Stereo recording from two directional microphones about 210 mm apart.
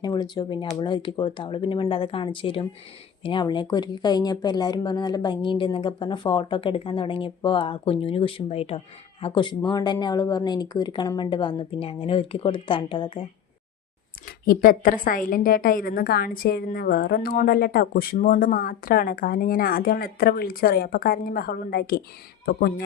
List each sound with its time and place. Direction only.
0.0 s speech: 20° left (ahead or behind)
14.3 s a woman's voice: 45° left (ahead or behind)